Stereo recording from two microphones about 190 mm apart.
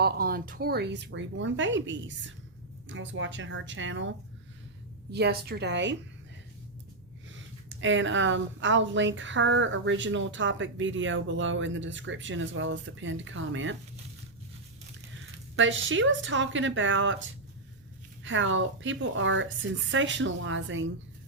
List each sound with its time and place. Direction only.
0.0 s speech: 50° right (ahead or behind); by 4.1 s 80° right
5.1 s speech: 60° right (ahead or behind)
7.3 s speech: 80° right
15.5 s speech: 85° right
18.2 s speech: 85° right